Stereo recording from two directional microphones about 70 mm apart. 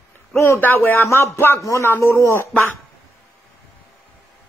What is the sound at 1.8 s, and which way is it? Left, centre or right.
Speech, left.